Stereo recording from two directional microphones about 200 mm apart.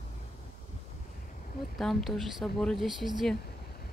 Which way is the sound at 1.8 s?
Centre (ahead or behind).